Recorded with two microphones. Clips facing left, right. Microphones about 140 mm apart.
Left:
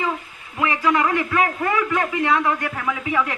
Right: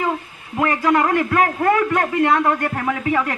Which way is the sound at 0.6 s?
45° right (ahead or behind).